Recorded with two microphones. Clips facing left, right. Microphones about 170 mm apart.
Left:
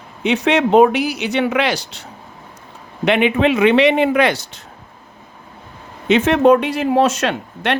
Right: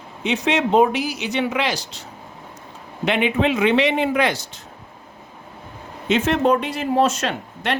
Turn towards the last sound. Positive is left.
turn(degrees=70)  # may be behind; listen again after turning